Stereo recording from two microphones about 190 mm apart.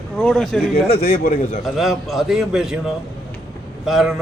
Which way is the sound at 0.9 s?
30° left (ahead or behind).